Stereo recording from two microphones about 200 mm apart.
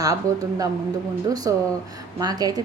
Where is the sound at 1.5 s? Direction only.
15° right (ahead or behind).